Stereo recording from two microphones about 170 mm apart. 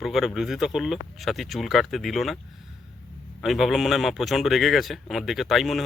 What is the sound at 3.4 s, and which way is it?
Speech, centre (ahead or behind).